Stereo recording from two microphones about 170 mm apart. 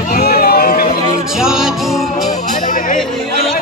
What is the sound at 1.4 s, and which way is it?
Music, 5° right (ahead or behind).